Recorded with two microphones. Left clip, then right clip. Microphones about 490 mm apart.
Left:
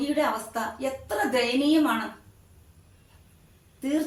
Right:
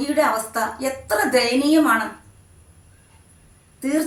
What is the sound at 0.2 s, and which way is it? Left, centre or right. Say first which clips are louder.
A woman's voice: right 10 dB; left.